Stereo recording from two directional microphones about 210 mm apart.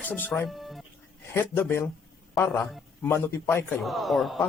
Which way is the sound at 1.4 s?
10° left (ahead or behind).